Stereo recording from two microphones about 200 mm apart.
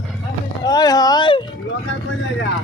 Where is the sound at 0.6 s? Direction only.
20° left (ahead or behind).